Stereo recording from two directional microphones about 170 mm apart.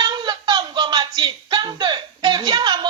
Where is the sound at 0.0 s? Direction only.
25° right (ahead or behind).